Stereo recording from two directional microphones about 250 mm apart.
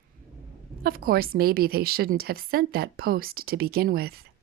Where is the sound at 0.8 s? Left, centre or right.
Right.